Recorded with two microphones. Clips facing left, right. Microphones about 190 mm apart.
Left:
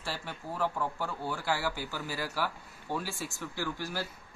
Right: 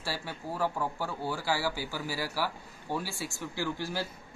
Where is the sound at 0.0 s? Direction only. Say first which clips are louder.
Right 2 dB; 10° right (ahead or behind).